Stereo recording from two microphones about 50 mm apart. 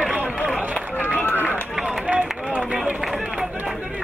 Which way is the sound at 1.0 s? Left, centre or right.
Left.